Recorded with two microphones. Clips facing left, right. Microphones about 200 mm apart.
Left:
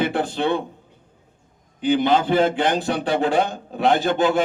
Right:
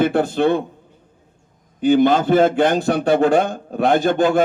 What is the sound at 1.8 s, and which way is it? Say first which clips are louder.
A man's voice: right 4 dB; 50° right (ahead or behind).